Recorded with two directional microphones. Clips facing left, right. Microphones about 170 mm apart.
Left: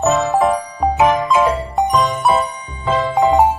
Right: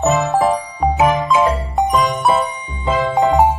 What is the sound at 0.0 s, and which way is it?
Music, centre (ahead or behind).